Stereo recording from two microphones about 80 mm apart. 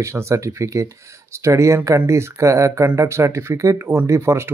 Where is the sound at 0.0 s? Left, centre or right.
Right.